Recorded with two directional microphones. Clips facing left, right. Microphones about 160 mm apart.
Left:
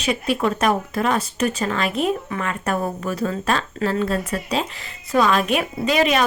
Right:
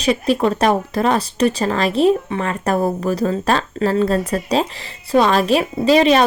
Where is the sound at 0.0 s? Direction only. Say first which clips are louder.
Right 5 dB; 35° right (ahead or behind).